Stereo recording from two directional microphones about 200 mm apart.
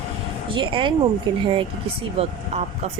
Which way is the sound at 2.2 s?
30° right (ahead or behind).